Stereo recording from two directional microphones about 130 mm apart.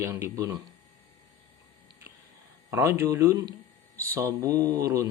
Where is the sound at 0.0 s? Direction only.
20° right (ahead or behind).